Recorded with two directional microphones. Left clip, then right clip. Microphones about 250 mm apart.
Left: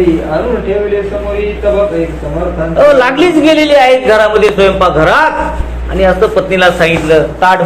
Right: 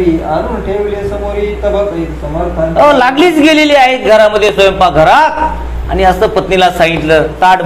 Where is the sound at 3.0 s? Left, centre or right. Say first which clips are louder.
Right 1 dB; right.